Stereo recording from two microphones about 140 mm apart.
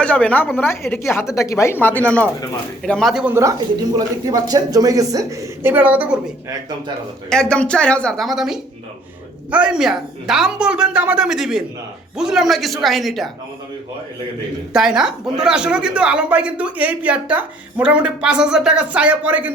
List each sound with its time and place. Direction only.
0.0 s a woman's voice: 10° left (ahead or behind)
1.2 s speech: 5° right (ahead or behind)
1.5 s a woman's voice: 20° left (ahead or behind); by 3.3 s 5° right (ahead or behind)
3.9 s speech: 25° right (ahead or behind)
5.6 s speech: 15° right (ahead or behind)
7.3 s speech: 5° left (ahead or behind)
14.7 s speech: 5° right (ahead or behind)